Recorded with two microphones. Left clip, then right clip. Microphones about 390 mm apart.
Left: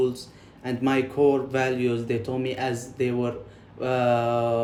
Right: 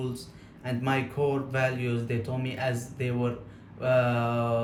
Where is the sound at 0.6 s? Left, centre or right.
Centre.